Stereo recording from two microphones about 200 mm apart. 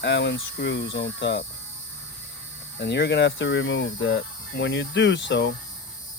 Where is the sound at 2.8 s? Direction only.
55° left (ahead or behind).